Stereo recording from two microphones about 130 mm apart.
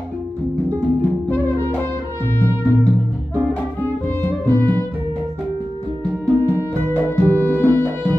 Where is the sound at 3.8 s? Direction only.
15° left (ahead or behind).